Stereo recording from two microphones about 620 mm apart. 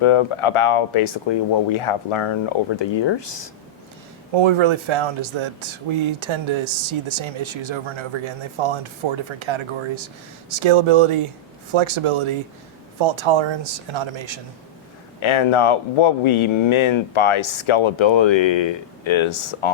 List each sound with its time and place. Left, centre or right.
0.0 s speech: left
4.4 s speech: right
15.2 s speech: left